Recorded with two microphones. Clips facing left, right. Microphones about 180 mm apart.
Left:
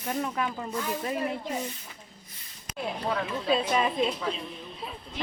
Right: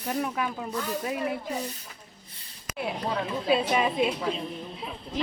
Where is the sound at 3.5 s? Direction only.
5° right (ahead or behind).